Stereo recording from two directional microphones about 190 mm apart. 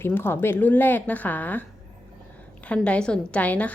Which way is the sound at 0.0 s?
10° left (ahead or behind).